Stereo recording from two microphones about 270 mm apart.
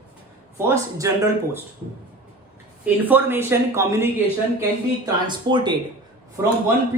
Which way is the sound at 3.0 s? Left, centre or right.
Centre.